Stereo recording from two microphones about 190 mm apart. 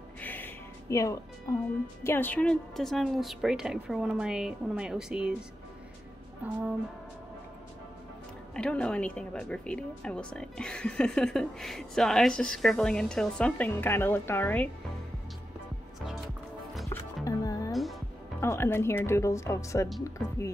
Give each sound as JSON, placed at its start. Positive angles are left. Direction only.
{"t": 0.2, "sound": "music", "side_deg": 10}
{"t": 1.5, "sound": "a woman's voice", "side_deg": 20}
{"t": 8.5, "sound": "speech", "side_deg": 5}
{"t": 16.9, "sound": "music", "side_deg": 20}
{"t": 18.4, "sound": "a woman's voice", "side_deg": 15}